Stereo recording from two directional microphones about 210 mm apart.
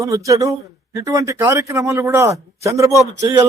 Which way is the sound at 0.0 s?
15° right (ahead or behind).